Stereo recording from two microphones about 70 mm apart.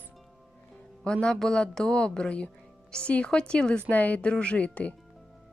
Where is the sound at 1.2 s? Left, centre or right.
Centre.